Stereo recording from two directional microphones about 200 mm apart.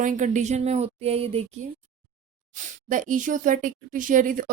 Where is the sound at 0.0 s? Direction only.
40° right (ahead or behind).